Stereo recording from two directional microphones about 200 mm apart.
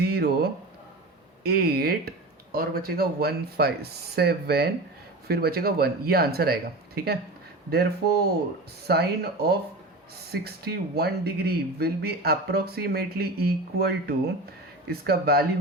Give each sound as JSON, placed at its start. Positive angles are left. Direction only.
{"t": 0.0, "sound": "a sound", "side_deg": -55}
{"t": 1.5, "sound": "speech", "side_deg": -50}
{"t": 8.9, "sound": "speech", "side_deg": -55}